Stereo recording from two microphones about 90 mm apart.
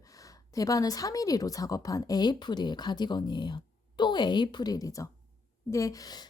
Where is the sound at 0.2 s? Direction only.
40° left (ahead or behind).